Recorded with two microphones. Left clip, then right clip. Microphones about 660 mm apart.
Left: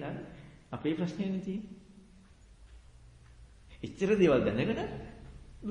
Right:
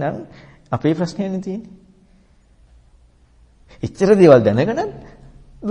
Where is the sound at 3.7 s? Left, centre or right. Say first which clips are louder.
Right 15 dB; right.